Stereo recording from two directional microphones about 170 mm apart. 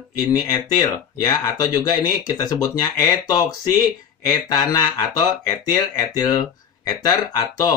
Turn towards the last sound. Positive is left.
turn(degrees=25)  # may be behind; listen again after turning